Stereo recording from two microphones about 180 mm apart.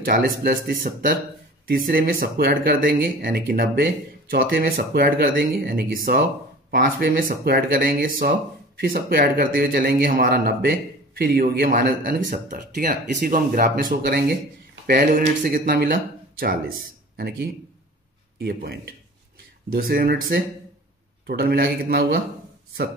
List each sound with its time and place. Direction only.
0.0 s speech: 55° right (ahead or behind)
1.9 s speech: 50° right (ahead or behind)
18.4 s speech: 60° right (ahead or behind)